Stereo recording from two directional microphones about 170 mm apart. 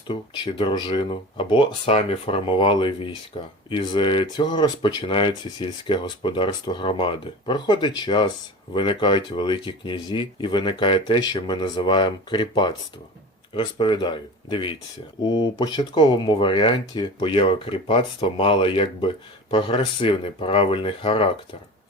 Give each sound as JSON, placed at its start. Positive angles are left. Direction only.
{"t": 0.1, "sound": "speech", "side_deg": 25}